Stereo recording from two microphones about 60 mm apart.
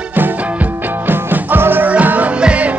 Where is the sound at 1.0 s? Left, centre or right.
Right.